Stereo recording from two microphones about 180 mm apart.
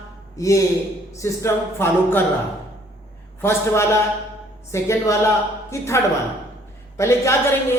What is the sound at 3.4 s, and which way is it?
A man's voice, 15° left (ahead or behind).